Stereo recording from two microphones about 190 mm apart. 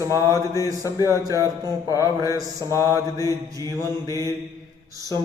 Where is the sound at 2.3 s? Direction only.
15° right (ahead or behind).